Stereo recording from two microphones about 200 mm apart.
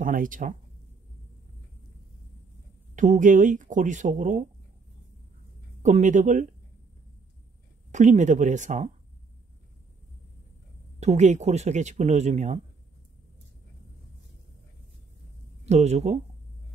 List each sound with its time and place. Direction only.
0.0 s speech: 40° right (ahead or behind)
3.0 s speech: 40° right (ahead or behind)
5.8 s speech: 40° right (ahead or behind)
7.9 s speech: 40° right (ahead or behind)
11.0 s speech: 35° right (ahead or behind)
15.6 s speech: 35° right (ahead or behind)